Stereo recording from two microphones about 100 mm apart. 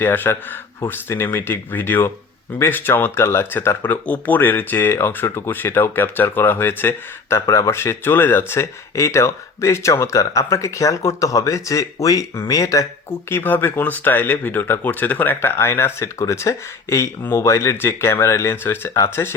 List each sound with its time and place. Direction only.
0.0 s speech: 20° left (ahead or behind)
13.1 s speech: 20° left (ahead or behind)